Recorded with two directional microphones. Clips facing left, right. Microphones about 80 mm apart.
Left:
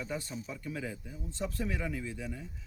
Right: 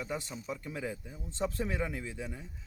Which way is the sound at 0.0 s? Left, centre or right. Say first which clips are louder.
Even; centre.